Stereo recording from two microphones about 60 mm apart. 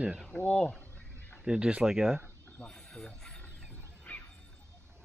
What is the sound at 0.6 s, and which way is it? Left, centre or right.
Speech, centre.